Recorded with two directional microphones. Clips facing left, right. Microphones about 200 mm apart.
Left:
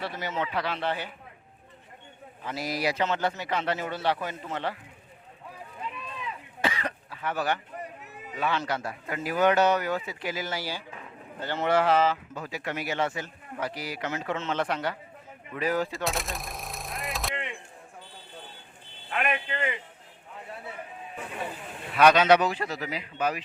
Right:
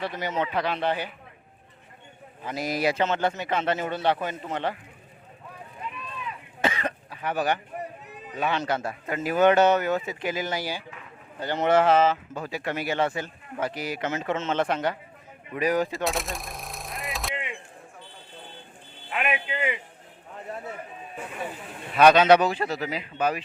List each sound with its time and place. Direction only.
0.0 s speech: 20° right (ahead or behind)
2.4 s a man's voice: 15° right (ahead or behind)
6.6 s cough: 20° right (ahead or behind)
8.3 s a man's voice: 20° right (ahead or behind)
16.0 s gunshot: centre (ahead or behind)
19.1 s music: 5° right (ahead or behind)
21.9 s a man's voice: 30° right (ahead or behind)